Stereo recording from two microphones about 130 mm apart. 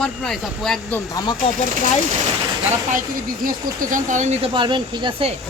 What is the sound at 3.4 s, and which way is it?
Speech, 90° right.